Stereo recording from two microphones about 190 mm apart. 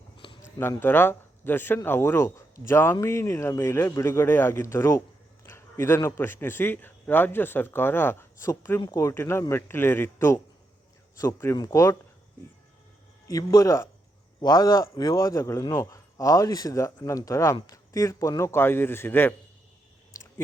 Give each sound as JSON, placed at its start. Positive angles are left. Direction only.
{"t": 0.2, "sound": "a sound", "side_deg": 25}
{"t": 0.6, "sound": "a man's voice", "side_deg": 10}
{"t": 13.2, "sound": "a man's voice", "side_deg": 20}